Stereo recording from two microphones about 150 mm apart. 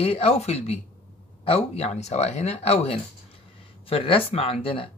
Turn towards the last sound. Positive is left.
turn(degrees=40)  # may be behind; listen again after turning